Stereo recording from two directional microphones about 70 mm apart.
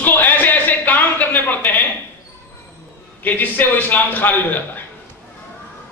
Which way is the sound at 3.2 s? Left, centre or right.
Left.